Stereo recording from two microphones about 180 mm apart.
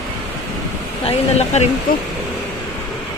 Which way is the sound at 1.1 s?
35° left (ahead or behind).